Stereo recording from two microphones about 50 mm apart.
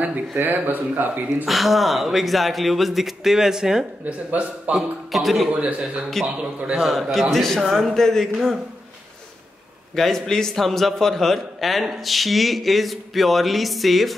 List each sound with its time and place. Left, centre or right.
0.4 s speech: right
1.4 s a man's voice: centre
4.0 s speech: right
4.7 s a man's voice: centre
5.6 s speech: right
6.2 s a man's voice: centre
9.9 s a man's voice: centre